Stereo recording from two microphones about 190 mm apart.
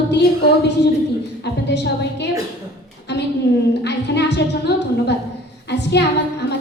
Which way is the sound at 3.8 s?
65° left (ahead or behind).